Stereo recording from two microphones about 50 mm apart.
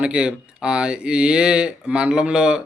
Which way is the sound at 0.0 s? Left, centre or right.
Centre.